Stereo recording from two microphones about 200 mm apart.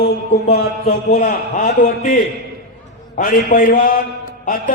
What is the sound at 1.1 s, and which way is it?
A man's voice, 40° left (ahead or behind).